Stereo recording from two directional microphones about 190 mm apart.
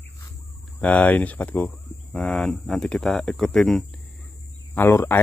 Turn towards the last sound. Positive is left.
turn(degrees=15)  # may be behind; listen again after turning